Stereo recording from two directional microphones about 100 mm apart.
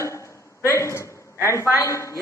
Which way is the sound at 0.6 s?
30° left (ahead or behind).